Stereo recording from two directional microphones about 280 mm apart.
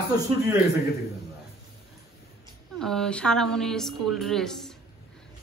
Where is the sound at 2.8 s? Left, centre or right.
Centre.